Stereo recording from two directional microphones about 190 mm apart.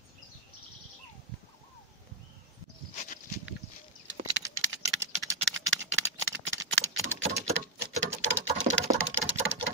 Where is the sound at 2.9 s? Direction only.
40° left (ahead or behind).